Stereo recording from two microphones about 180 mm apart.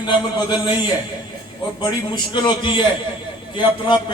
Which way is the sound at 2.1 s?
25° left (ahead or behind).